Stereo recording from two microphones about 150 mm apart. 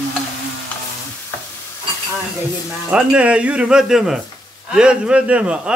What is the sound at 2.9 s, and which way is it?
A man's voice, 10° right (ahead or behind).